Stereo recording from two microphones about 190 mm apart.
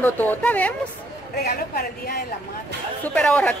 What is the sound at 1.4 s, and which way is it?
Speech, 50° left (ahead or behind).